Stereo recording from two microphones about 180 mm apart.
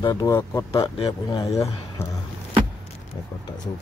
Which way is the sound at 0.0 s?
20° left (ahead or behind).